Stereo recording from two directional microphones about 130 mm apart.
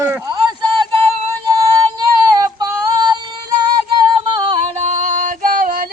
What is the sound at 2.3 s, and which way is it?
Female singing, 30° right (ahead or behind).